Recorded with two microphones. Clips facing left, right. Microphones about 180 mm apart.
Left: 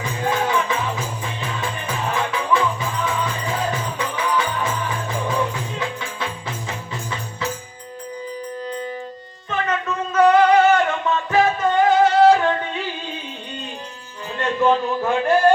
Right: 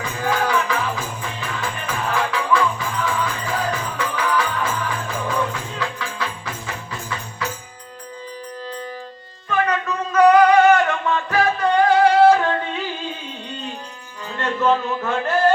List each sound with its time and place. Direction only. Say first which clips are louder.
0.2 s music: even; 20° left (ahead or behind)
9.5 s female singing: right 2 dB; 25° left (ahead or behind)
11.3 s music: left 1 dB; 20° left (ahead or behind)
14.3 s music: left 1 dB; 15° left (ahead or behind)